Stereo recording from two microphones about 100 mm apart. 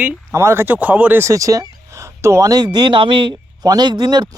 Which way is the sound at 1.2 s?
35° right (ahead or behind).